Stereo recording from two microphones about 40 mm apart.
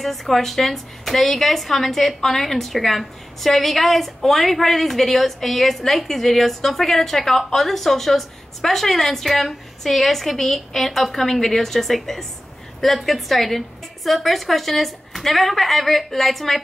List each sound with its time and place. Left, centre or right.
0.0 s a woman's voice: centre